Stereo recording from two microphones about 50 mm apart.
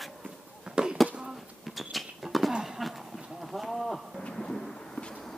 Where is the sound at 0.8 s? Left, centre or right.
Centre.